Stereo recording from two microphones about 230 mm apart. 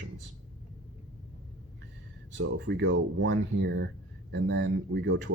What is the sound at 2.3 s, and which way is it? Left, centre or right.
Speech, right.